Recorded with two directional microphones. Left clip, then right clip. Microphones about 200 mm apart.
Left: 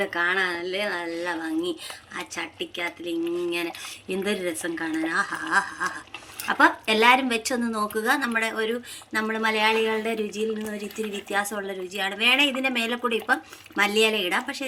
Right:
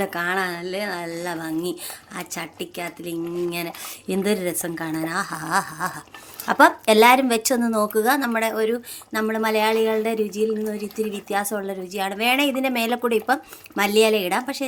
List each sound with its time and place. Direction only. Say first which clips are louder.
0.0 s speech: even; 50° right (ahead or behind)